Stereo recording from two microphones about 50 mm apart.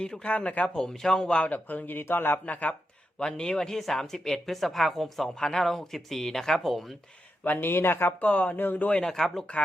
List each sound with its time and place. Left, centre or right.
0.3 s speech: left
0.8 s speech: centre
1.5 s speech: left
2.5 s speech: left
3.2 s speech: centre
7.4 s speech: left
8.2 s speech: left
9.0 s speech: centre